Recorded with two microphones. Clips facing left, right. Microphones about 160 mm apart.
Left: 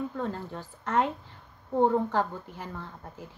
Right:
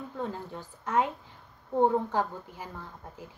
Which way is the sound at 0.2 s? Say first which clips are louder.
Left 2 dB; 15° right (ahead or behind).